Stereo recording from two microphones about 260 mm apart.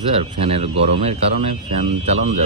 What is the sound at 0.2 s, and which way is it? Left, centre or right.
Speech, right.